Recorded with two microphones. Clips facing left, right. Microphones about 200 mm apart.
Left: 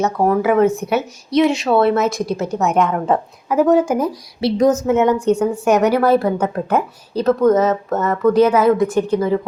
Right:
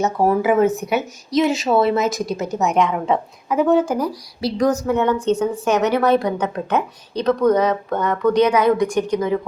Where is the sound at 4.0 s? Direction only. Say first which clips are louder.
Left 3 dB; 25° left (ahead or behind).